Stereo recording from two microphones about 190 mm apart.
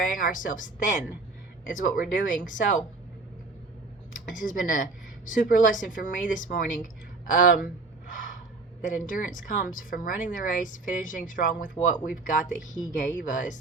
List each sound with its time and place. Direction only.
0.0 s speech: 45° left (ahead or behind)
4.1 s speech: 45° left (ahead or behind)
7.3 s a sound: 45° left (ahead or behind)
8.8 s speech: 45° left (ahead or behind)